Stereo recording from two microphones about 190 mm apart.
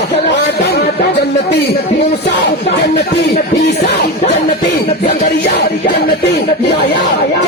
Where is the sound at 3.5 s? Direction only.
40° left (ahead or behind); by 7.0 s 60° left (ahead or behind).